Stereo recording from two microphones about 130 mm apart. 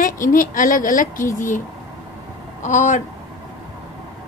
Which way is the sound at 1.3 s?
75° left (ahead or behind).